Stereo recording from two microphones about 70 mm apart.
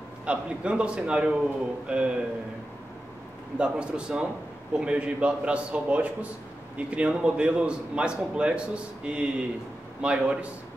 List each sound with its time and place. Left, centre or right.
0.2 s a man's voice: centre
3.5 s a man's voice: centre